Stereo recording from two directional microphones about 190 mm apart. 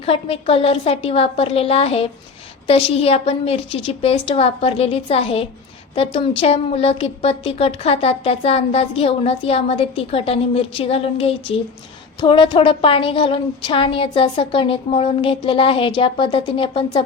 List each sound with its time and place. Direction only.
0.0 s a woman's voice: 30° left (ahead or behind)